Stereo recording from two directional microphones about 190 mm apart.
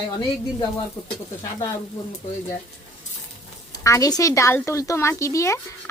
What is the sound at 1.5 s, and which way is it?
Speech, 15° left (ahead or behind).